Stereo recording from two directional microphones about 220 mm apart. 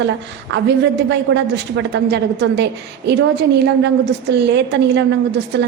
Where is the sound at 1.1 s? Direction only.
55° right (ahead or behind).